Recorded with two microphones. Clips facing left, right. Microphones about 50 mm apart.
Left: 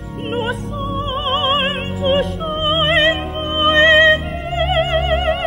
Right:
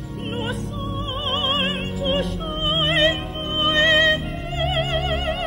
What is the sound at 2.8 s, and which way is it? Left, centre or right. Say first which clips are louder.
Music: left 4 dB; left.